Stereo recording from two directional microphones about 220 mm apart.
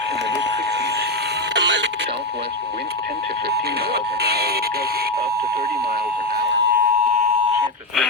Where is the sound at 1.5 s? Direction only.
55° right (ahead or behind).